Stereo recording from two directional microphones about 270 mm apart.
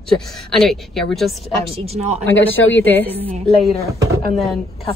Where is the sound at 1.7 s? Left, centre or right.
Right.